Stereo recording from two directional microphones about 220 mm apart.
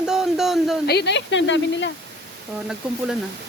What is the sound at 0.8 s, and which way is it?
Speech, 50° left (ahead or behind).